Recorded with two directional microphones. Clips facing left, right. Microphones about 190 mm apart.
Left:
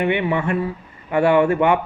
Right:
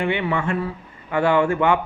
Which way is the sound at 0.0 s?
20° left (ahead or behind).